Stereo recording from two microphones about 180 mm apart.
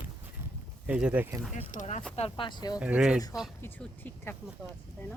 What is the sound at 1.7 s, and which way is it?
Speech, 45° left (ahead or behind).